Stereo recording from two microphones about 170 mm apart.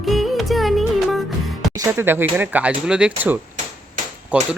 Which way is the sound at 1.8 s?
15° right (ahead or behind).